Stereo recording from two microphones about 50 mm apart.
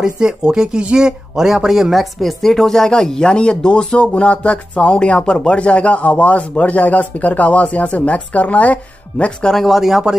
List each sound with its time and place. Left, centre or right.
0.0 s speech: centre; by 8.7 s left
9.5 s speech: centre
9.8 s speech: centre